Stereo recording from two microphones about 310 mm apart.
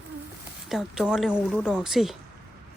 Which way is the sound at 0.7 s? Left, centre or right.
Centre.